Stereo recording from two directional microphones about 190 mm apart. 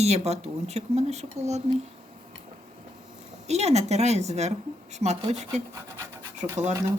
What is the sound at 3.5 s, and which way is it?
A woman's voice, 35° right (ahead or behind).